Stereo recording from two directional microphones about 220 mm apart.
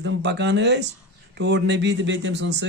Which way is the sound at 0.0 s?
50° right (ahead or behind).